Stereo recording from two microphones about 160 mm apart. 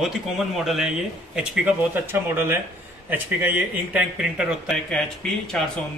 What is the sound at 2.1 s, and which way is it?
Speech, 15° right (ahead or behind).